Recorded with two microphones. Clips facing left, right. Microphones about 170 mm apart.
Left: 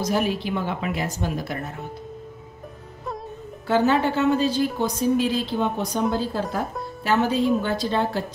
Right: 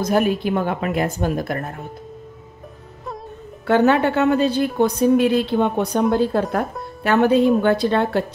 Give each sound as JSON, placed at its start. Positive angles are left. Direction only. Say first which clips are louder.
{"t": 0.0, "sound": "speech", "louder": "right 5 dB", "side_deg": -55}
{"t": 3.6, "sound": "a woman's voice", "louder": "right 4 dB", "side_deg": -65}